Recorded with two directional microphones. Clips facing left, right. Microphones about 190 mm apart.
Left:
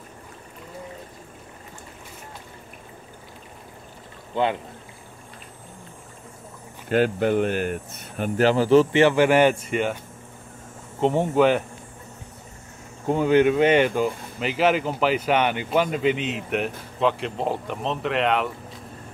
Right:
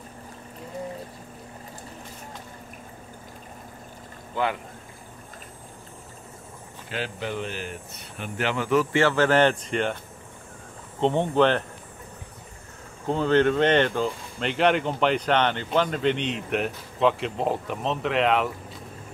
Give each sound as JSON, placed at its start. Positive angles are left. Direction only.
{"t": 4.4, "sound": "speech", "side_deg": 20}
{"t": 6.9, "sound": "speech", "side_deg": 50}
{"t": 8.9, "sound": "speech", "side_deg": 15}
{"t": 11.0, "sound": "speech", "side_deg": 5}
{"t": 13.0, "sound": "speech", "side_deg": 15}